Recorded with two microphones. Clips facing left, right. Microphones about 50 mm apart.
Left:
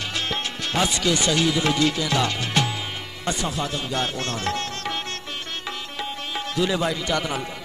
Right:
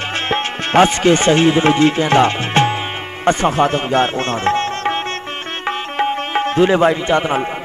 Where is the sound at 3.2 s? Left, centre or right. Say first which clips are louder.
Right 13 dB; right.